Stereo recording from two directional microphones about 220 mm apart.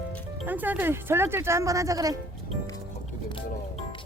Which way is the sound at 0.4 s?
10° right (ahead or behind).